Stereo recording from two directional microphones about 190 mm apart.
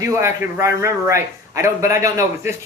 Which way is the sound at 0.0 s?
15° right (ahead or behind).